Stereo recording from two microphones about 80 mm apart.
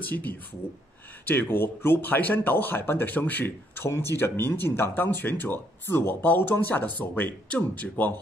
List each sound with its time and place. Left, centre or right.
0.0 s speech: left